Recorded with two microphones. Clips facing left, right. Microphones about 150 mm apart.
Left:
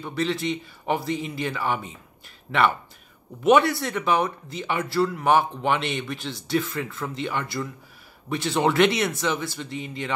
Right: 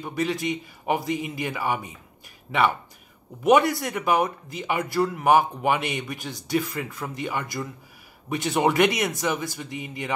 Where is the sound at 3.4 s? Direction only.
15° right (ahead or behind).